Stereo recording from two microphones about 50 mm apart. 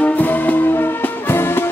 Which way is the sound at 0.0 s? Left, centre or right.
Left.